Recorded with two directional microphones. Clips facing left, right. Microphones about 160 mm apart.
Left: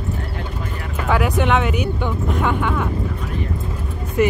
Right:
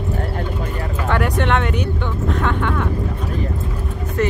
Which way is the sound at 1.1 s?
5° left (ahead or behind).